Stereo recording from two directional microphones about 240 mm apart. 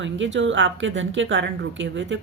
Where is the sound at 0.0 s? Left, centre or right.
Right.